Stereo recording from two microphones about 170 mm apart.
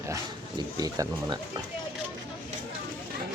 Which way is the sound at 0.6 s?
20° right (ahead or behind).